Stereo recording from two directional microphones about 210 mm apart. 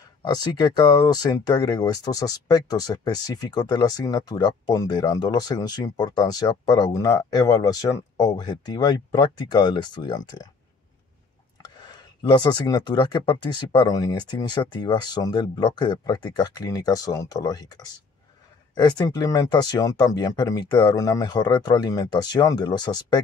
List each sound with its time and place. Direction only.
0.2 s speech: 20° left (ahead or behind)
11.6 s speech: 20° left (ahead or behind)